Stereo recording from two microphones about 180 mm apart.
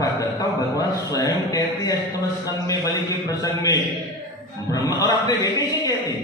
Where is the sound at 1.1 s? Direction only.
20° left (ahead or behind).